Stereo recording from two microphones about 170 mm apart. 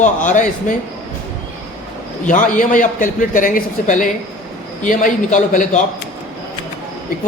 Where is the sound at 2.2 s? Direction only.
50° left (ahead or behind).